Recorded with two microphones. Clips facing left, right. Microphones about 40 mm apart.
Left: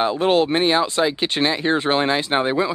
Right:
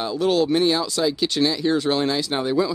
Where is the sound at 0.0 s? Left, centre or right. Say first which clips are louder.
Left 3 dB; left.